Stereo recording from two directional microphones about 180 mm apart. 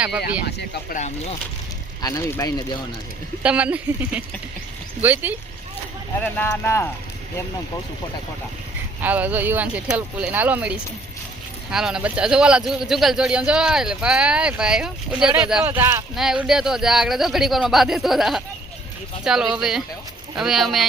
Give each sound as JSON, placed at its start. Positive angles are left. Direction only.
{"t": 0.2, "sound": "speech", "side_deg": 65}
{"t": 2.0, "sound": "speech", "side_deg": 20}
{"t": 3.4, "sound": "speech", "side_deg": -5}
{"t": 6.2, "sound": "speech", "side_deg": 10}
{"t": 9.0, "sound": "speech", "side_deg": -10}